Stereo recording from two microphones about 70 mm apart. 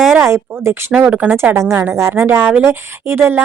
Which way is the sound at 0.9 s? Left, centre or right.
Centre.